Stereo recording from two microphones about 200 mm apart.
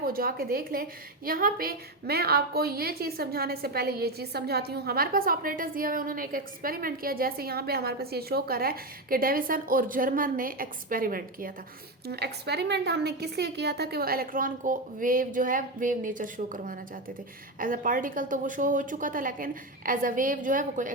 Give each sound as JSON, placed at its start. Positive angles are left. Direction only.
{"t": 0.0, "sound": "a woman's voice", "side_deg": -45}